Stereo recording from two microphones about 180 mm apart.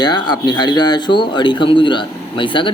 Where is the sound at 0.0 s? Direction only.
25° left (ahead or behind).